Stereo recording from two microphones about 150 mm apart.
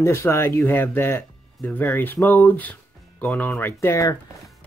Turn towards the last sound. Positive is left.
turn(degrees=20)  # may be behind; listen again after turning